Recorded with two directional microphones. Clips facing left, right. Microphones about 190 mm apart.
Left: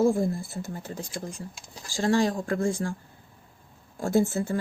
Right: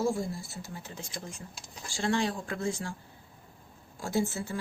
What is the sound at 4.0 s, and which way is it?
Speech, 50° left (ahead or behind).